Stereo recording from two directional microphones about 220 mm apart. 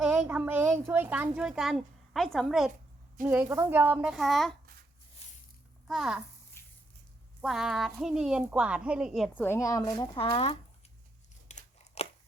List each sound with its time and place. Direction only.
0.0 s a child's voice: 5° right (ahead or behind)
5.9 s a woman's voice: centre (ahead or behind)
7.4 s a woman's voice: centre (ahead or behind)
9.5 s speech: 15° left (ahead or behind)
11.4 s crunch: 30° left (ahead or behind)